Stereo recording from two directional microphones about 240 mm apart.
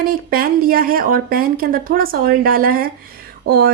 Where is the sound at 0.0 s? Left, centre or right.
Right.